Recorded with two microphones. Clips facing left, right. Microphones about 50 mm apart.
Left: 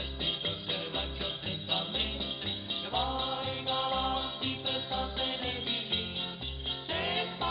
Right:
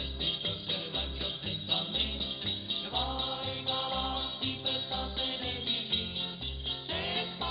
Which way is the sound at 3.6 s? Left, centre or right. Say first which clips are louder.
Left 3 dB; centre.